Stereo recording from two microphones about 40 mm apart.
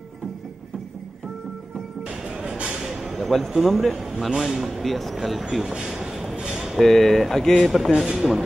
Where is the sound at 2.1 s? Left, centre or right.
Centre.